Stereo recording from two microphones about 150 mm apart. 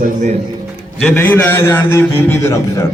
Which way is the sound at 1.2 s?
15° left (ahead or behind).